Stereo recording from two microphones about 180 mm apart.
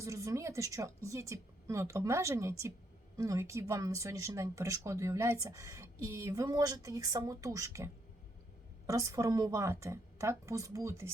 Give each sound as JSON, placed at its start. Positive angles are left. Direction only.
{"t": 0.0, "sound": "speech", "side_deg": -15}
{"t": 8.9, "sound": "speech", "side_deg": -20}